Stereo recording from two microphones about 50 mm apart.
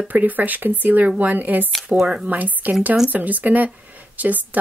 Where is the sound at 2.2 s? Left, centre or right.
Right.